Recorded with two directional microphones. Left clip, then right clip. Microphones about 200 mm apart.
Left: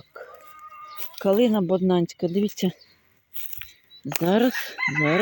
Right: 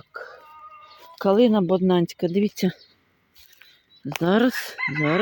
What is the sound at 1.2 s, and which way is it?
Speech, 20° right (ahead or behind).